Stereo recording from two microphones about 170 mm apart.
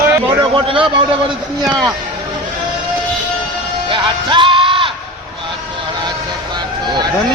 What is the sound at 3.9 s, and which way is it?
Music, 30° right (ahead or behind).